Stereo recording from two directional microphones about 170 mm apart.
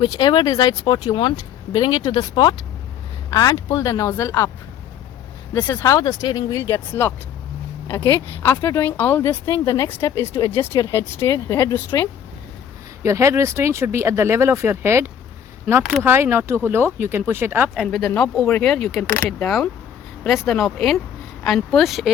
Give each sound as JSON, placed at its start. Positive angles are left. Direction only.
{"t": 0.0, "sound": "speech", "side_deg": 25}
{"t": 5.5, "sound": "speech", "side_deg": 15}
{"t": 13.0, "sound": "speech", "side_deg": -15}
{"t": 15.6, "sound": "speech", "side_deg": -5}
{"t": 16.0, "sound": "speech", "side_deg": -15}
{"t": 17.7, "sound": "speech", "side_deg": 0}